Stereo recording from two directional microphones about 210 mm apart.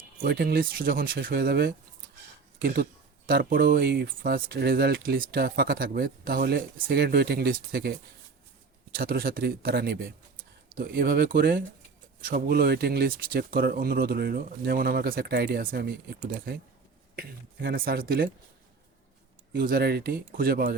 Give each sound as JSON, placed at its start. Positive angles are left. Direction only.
{"t": 0.2, "sound": "speech", "side_deg": -45}
{"t": 9.0, "sound": "speech", "side_deg": -45}
{"t": 19.5, "sound": "speech", "side_deg": -45}